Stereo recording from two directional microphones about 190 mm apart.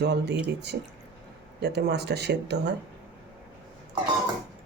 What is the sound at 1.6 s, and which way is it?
Speech, 60° right (ahead or behind).